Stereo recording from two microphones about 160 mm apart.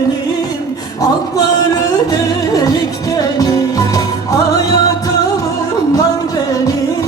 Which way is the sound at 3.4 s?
25° left (ahead or behind).